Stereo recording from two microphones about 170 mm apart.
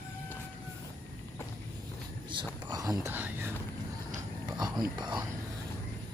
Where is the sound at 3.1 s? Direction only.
10° right (ahead or behind).